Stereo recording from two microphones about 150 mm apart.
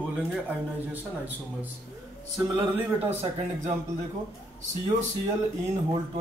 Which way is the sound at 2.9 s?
40° right (ahead or behind).